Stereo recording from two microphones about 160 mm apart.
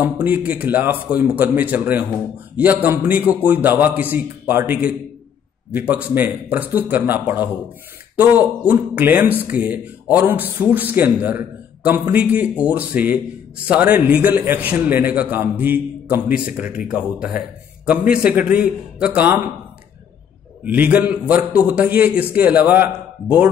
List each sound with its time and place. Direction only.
0.0 s speech: 10° right (ahead or behind)
20.6 s speech: 10° right (ahead or behind)